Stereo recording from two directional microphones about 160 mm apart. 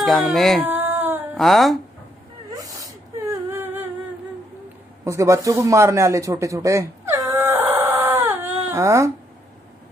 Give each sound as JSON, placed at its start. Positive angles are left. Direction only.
{"t": 0.0, "sound": "speech", "side_deg": 0}
{"t": 0.6, "sound": "baby cry", "side_deg": -10}
{"t": 1.3, "sound": "speech", "side_deg": 0}
{"t": 2.5, "sound": "sneeze", "side_deg": -20}
{"t": 3.4, "sound": "humming", "side_deg": -15}
{"t": 5.0, "sound": "a sound", "side_deg": -20}